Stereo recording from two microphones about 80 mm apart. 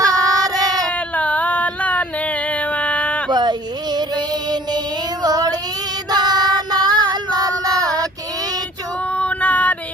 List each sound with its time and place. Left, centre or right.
0.1 s child singing: right
0.9 s a sound: centre
3.2 s a sound: right
3.9 s music: right
5.2 s child singing: right
9.1 s female singing: centre